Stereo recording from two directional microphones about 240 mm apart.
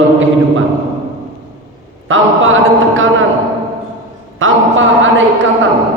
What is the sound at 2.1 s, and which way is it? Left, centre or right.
A man's voice, right.